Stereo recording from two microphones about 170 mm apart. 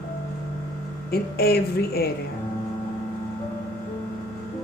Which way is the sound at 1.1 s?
65° left (ahead or behind).